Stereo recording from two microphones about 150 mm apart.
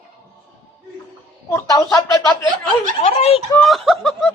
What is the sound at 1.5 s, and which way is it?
Speech, 20° left (ahead or behind).